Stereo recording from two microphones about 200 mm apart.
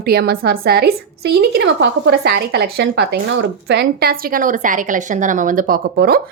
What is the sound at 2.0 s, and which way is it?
A woman's voice, 55° right (ahead or behind).